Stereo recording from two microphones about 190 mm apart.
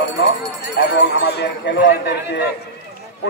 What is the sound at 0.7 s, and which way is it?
A man's voice, 60° left (ahead or behind).